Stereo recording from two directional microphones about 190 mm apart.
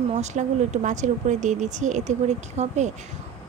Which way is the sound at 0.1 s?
40° right (ahead or behind).